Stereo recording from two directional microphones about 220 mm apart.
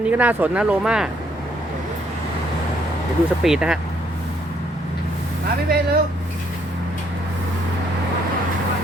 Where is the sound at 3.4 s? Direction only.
5° right (ahead or behind).